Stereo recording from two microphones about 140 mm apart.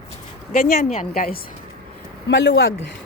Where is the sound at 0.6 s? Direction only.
80° left.